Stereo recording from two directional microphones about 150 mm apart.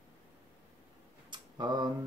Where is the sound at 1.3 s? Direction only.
30° right (ahead or behind).